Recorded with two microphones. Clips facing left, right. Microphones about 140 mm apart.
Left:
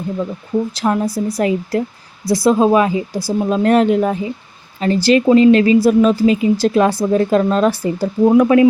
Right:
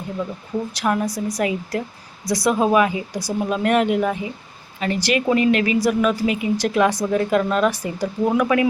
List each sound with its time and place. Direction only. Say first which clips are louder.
0.7 s a woman's voice: left 4 dB; 25° left (ahead or behind)